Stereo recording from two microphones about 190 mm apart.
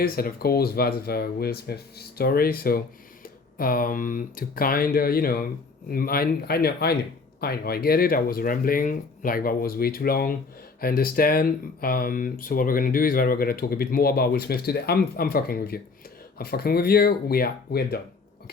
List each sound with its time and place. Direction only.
0.0 s speech: 50° left (ahead or behind)